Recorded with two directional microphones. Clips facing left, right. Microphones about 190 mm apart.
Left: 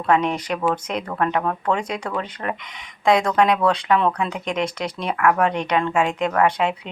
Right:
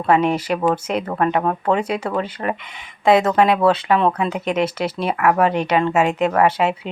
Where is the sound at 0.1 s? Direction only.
5° right (ahead or behind).